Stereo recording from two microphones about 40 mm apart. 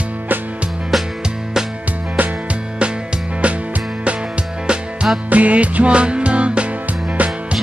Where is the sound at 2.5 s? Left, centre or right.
Right.